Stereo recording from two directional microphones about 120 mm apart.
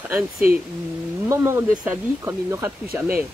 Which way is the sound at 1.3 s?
25° right (ahead or behind).